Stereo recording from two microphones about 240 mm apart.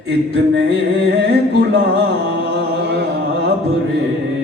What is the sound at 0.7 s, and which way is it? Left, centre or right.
Music, right.